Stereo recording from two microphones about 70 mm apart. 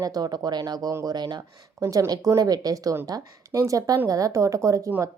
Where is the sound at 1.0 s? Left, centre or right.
Right.